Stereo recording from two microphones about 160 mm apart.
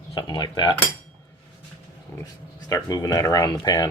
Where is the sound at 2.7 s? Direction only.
20° left (ahead or behind).